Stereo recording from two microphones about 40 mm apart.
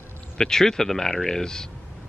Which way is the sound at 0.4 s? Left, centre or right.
Centre.